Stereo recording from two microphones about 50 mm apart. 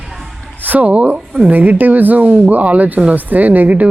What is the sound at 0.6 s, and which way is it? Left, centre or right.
A woman's voice, right.